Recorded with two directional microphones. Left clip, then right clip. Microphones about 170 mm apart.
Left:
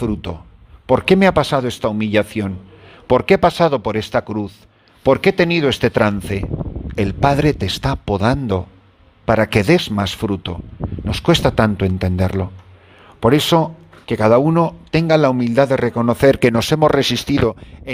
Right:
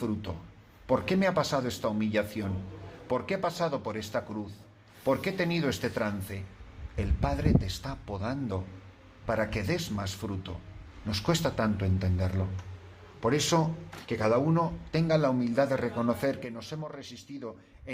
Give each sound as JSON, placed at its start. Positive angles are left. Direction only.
{"t": 0.0, "sound": "a man's voice", "side_deg": 55}